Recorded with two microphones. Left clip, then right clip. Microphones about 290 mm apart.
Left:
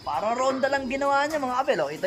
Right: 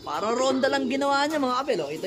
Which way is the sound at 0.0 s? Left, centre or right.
Centre.